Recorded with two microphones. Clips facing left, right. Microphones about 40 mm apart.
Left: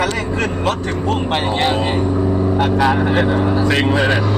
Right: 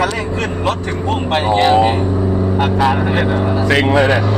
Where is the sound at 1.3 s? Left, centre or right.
Right.